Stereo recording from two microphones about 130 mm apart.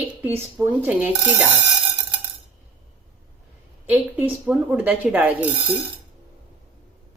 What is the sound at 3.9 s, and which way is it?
Speech, 15° right (ahead or behind).